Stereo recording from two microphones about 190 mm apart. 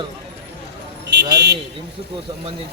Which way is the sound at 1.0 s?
60° right (ahead or behind).